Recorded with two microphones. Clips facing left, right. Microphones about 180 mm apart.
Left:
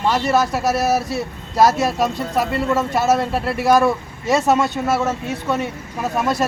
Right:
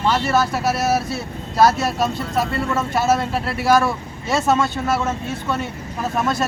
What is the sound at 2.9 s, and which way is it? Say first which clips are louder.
Speech: left 1 dB; centre (ahead or behind).